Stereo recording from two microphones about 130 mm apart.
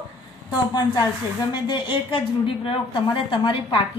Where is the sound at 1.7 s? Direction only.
40° left (ahead or behind).